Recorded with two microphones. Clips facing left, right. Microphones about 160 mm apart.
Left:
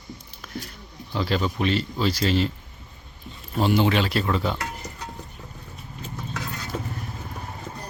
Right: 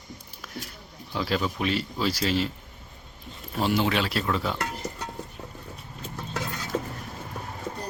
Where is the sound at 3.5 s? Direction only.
Centre (ahead or behind).